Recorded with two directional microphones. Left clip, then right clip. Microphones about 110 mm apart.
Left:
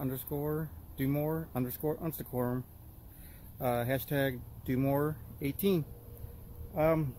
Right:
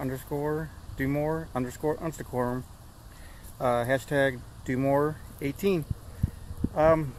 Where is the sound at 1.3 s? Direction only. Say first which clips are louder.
Right 5 dB; 10° left (ahead or behind).